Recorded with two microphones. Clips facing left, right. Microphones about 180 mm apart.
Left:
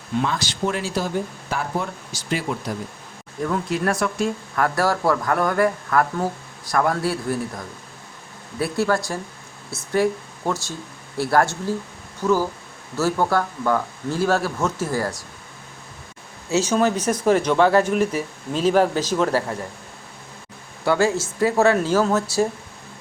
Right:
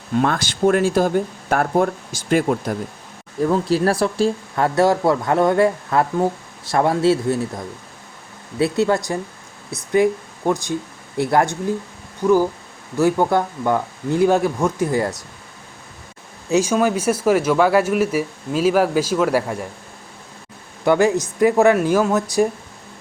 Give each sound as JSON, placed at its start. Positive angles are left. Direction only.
{"t": 0.2, "sound": "speech", "side_deg": -50}
{"t": 3.4, "sound": "speech", "side_deg": -35}
{"t": 16.5, "sound": "speech", "side_deg": -10}
{"t": 20.8, "sound": "speech", "side_deg": -20}